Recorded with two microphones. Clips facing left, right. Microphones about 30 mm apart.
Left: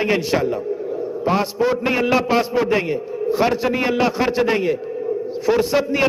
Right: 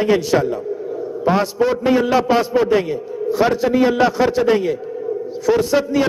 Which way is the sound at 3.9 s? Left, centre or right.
Centre.